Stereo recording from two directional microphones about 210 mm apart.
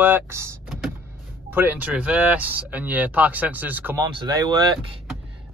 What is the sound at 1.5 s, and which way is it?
Speech, 10° right (ahead or behind).